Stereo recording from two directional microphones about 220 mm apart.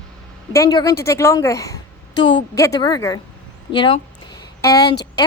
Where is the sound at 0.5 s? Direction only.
15° left (ahead or behind).